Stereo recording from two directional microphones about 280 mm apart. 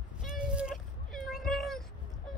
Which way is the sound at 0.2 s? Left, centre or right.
Centre.